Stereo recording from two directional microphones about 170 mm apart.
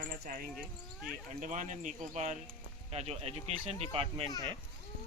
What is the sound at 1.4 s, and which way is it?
Speech, 45° right (ahead or behind).